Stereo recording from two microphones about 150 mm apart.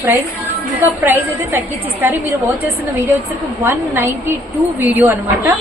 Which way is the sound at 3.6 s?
15° right (ahead or behind).